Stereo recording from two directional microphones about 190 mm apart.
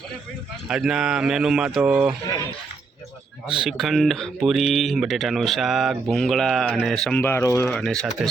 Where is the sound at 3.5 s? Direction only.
Centre (ahead or behind).